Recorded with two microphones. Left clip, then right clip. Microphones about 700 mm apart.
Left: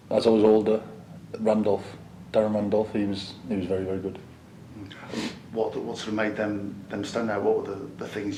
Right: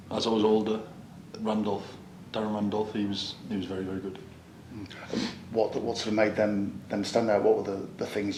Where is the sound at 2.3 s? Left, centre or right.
Centre.